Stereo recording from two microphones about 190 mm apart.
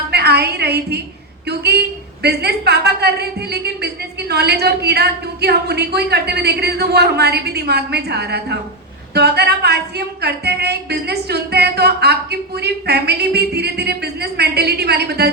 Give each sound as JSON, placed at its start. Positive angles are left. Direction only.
{"t": 0.1, "sound": "a woman's voice", "side_deg": -60}